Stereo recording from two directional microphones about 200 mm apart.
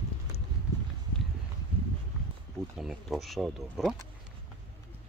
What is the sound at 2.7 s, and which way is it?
Speech, centre (ahead or behind).